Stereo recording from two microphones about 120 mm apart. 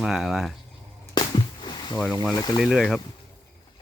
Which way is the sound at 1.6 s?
40° left (ahead or behind).